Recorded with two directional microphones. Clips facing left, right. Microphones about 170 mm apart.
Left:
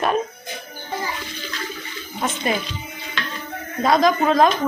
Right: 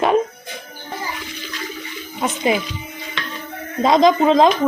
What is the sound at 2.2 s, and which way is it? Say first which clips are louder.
Speech: right 4 dB; 15° right (ahead or behind).